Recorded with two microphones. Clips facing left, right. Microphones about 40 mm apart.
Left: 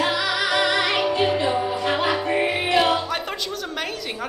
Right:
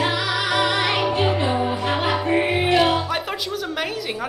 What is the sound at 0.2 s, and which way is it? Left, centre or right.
Music, right.